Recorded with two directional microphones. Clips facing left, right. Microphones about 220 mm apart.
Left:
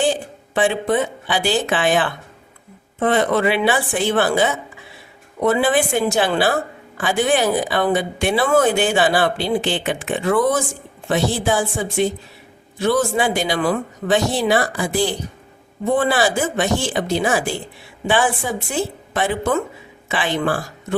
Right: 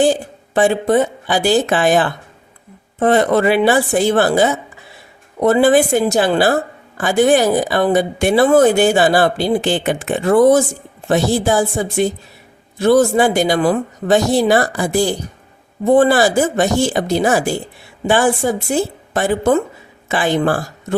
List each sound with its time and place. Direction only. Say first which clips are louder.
0.0 s a woman's voice: right 5 dB; 40° right (ahead or behind)